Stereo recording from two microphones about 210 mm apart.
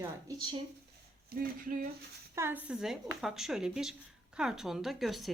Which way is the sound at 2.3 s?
10° right (ahead or behind).